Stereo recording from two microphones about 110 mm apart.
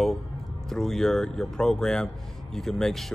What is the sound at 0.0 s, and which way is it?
Speech, 5° left (ahead or behind).